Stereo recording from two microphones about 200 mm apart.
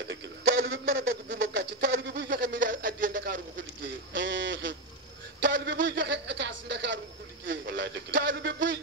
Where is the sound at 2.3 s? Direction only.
40° right (ahead or behind).